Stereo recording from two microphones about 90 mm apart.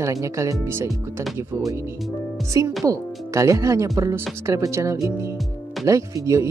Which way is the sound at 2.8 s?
35° right (ahead or behind).